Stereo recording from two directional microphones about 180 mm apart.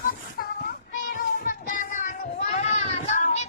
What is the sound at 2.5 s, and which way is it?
Children playing, 40° left (ahead or behind).